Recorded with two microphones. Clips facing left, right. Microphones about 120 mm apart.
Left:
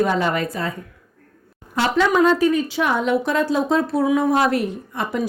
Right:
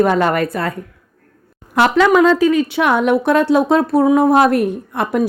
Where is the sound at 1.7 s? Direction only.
70° right (ahead or behind).